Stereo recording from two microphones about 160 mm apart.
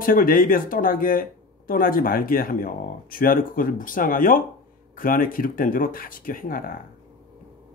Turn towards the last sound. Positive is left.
turn(degrees=65)  # may be behind; listen again after turning